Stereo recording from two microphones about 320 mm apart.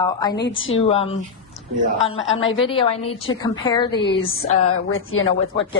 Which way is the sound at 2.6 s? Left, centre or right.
Centre.